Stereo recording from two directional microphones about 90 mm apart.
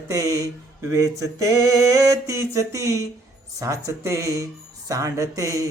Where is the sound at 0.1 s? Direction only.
40° right (ahead or behind).